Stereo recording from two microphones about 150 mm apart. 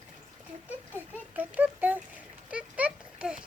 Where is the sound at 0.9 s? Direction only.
10° right (ahead or behind).